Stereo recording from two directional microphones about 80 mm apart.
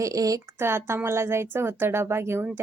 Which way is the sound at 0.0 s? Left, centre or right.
Right.